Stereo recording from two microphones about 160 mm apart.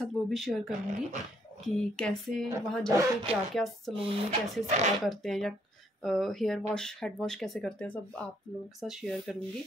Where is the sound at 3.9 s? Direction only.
35° right (ahead or behind).